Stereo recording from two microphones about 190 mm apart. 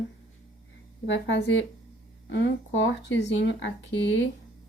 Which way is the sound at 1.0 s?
70° left (ahead or behind).